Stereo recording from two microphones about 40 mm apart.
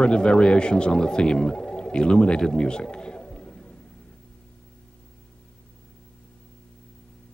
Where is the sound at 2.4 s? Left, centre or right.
Centre.